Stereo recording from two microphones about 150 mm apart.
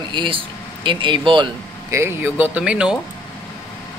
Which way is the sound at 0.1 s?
35° right (ahead or behind).